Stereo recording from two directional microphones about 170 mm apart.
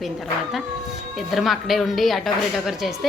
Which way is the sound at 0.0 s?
Centre (ahead or behind).